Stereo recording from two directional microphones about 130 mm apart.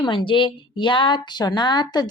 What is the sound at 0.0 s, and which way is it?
Speech, 40° left (ahead or behind).